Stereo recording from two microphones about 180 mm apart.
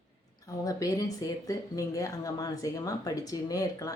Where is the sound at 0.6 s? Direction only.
20° left (ahead or behind).